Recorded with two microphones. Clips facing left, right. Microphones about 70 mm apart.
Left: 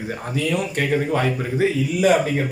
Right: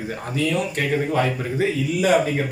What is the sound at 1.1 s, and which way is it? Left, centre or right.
Speech, left.